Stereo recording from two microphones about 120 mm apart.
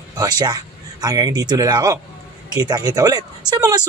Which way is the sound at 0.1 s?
30° right (ahead or behind).